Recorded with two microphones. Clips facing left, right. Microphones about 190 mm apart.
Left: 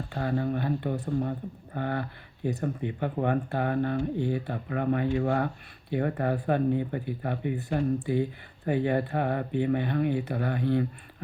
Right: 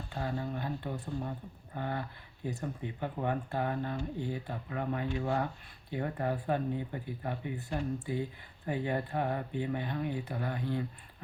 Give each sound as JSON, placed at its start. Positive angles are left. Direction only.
{"t": 0.1, "sound": "a sound", "side_deg": 60}
{"t": 1.0, "sound": "speech", "side_deg": 45}
{"t": 1.7, "sound": "speech", "side_deg": 65}